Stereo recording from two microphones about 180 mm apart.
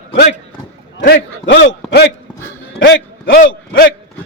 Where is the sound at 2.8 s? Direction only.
80° left.